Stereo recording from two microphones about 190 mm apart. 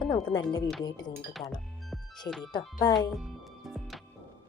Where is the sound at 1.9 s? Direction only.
Centre (ahead or behind).